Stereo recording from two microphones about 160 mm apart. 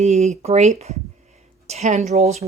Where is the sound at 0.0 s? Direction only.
45° right (ahead or behind).